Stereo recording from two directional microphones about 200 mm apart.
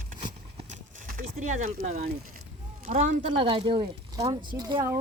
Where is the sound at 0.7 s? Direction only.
40° right (ahead or behind).